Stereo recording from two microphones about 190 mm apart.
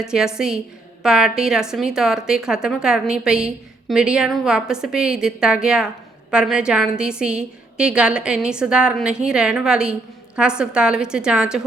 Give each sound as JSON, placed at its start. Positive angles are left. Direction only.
{"t": 0.0, "sound": "a woman's voice", "side_deg": -5}